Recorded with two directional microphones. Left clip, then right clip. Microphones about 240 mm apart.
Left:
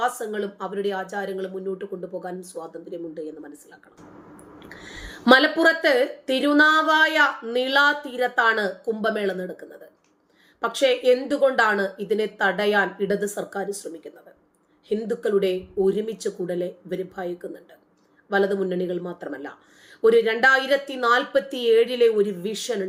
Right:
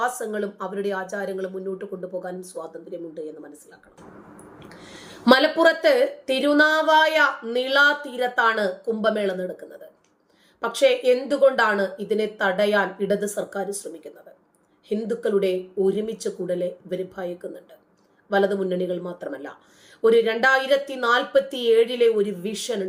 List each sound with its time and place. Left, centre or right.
0.0 s a woman's voice: centre
4.7 s a woman's voice: centre